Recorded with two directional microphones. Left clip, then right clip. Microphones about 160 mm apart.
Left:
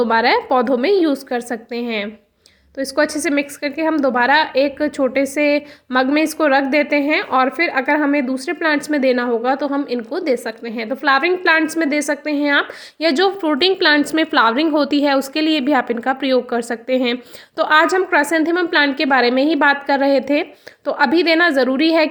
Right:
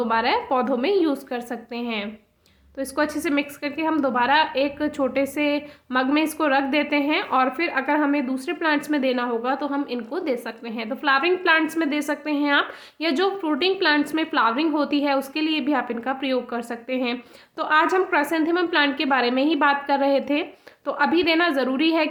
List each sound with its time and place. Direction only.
0.0 s a woman's voice: 40° left (ahead or behind)